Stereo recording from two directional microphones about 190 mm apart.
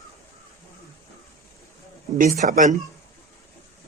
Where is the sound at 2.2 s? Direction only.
45° right (ahead or behind).